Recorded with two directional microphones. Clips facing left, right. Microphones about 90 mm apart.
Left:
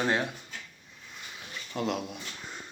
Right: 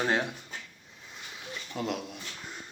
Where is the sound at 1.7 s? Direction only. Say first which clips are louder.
Left 2 dB; centre (ahead or behind).